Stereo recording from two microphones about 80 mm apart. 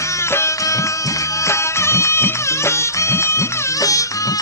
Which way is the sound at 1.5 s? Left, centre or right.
Left.